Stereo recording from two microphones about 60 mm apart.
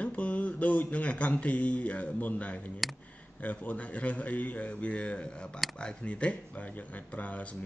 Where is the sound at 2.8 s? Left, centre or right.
Centre.